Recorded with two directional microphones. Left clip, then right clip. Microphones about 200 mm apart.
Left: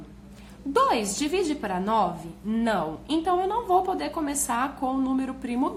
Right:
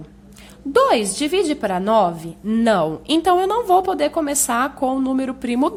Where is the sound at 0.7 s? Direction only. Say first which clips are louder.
Right 7 dB; 35° right (ahead or behind).